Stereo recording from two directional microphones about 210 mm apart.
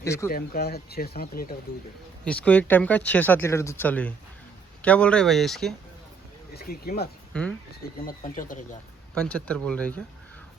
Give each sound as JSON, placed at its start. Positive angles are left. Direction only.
{"t": 0.0, "sound": "speech", "side_deg": 15}
{"t": 0.3, "sound": "speech", "side_deg": 45}
{"t": 2.2, "sound": "speech", "side_deg": 5}
{"t": 6.5, "sound": "speech", "side_deg": 45}
{"t": 7.3, "sound": "speech", "side_deg": 5}
{"t": 8.0, "sound": "speech", "side_deg": 40}
{"t": 9.1, "sound": "speech", "side_deg": 5}